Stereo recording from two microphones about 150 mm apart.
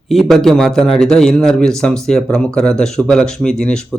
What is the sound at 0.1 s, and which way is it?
A man's voice, centre (ahead or behind).